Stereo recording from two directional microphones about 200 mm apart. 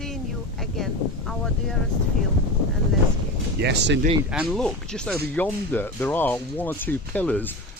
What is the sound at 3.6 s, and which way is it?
Speech, 55° right (ahead or behind).